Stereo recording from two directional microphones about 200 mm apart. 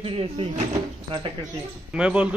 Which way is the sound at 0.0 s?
30° right (ahead or behind).